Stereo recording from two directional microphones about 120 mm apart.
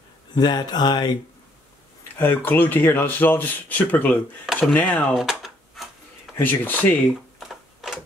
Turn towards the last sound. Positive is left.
turn(degrees=-5)  # may be behind; listen again after turning